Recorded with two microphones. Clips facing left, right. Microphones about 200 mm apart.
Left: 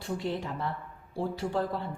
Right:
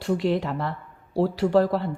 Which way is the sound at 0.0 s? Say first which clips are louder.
Right 9 dB; 90° right.